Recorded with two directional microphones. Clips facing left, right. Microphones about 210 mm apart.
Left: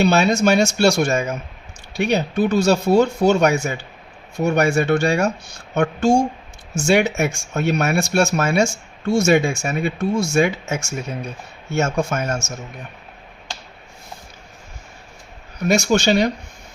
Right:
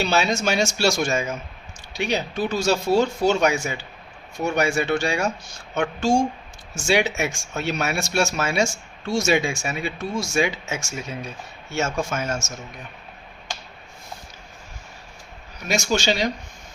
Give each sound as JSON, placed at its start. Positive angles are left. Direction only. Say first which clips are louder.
{"t": 0.0, "sound": "speech", "louder": "left 6 dB", "side_deg": 55}
{"t": 11.9, "sound": "speech", "louder": "left 4 dB", "side_deg": 60}
{"t": 15.6, "sound": "speech", "louder": "left 6 dB", "side_deg": 55}